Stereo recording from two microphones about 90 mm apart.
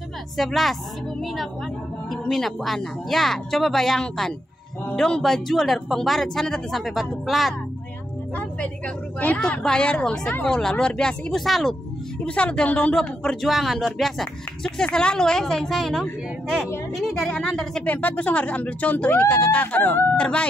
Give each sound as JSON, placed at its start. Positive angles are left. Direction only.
{"t": 0.4, "sound": "speech", "side_deg": 0}
{"t": 8.4, "sound": "speech", "side_deg": 15}
{"t": 12.3, "sound": "speech", "side_deg": 15}
{"t": 13.5, "sound": "speech", "side_deg": 0}
{"t": 17.9, "sound": "speech", "side_deg": 15}